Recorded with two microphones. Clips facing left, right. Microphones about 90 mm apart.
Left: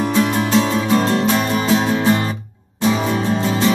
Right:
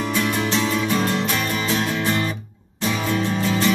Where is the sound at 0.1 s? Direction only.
30° left (ahead or behind).